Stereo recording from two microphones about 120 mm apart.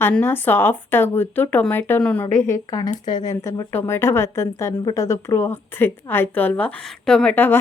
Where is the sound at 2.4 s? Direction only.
25° left (ahead or behind).